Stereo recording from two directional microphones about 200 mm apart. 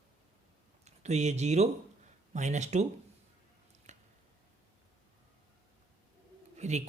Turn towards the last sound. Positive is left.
turn(degrees=-35)  # may be behind; listen again after turning